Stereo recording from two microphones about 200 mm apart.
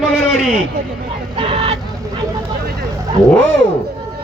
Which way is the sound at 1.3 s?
30° right (ahead or behind).